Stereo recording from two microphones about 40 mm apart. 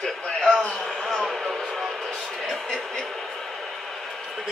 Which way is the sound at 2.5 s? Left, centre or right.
Centre.